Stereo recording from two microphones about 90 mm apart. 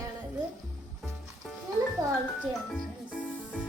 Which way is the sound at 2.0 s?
45° right (ahead or behind).